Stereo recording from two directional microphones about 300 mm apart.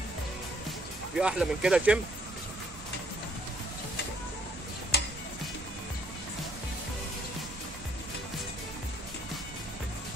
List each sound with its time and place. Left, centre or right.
1.1 s speech: centre
4.9 s music: left